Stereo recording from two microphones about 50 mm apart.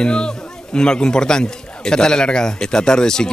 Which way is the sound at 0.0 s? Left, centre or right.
Centre.